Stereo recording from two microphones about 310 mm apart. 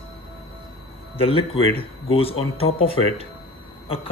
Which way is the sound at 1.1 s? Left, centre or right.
Centre.